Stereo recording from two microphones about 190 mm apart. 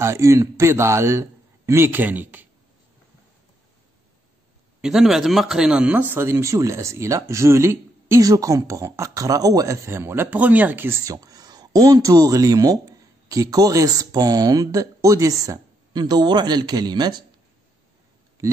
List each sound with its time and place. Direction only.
0.0 s speech: 15° right (ahead or behind)
4.8 s speech: centre (ahead or behind); by 17.2 s 20° right (ahead or behind)